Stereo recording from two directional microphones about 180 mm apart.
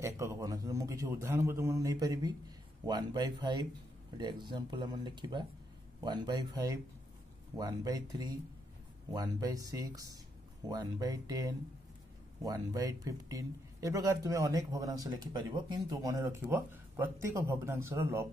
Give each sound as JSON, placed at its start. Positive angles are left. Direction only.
{"t": 0.0, "sound": "a man's voice", "side_deg": -15}